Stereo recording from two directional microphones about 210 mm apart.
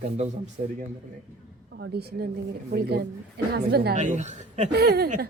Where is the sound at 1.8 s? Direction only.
50° right (ahead or behind).